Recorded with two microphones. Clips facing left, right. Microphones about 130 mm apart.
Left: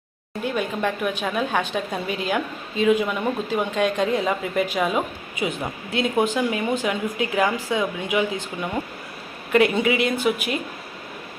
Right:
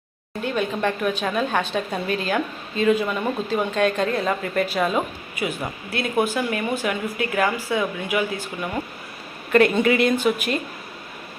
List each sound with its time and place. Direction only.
0.4 s a woman's voice: 10° left (ahead or behind)
5.4 s a woman's voice: 20° left (ahead or behind)